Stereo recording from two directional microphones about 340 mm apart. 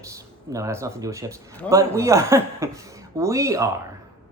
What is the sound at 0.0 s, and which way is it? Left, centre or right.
Speech, centre.